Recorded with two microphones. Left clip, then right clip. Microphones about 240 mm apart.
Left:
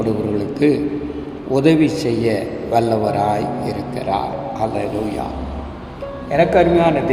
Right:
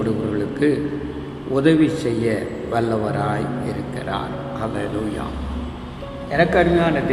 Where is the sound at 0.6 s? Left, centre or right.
Centre.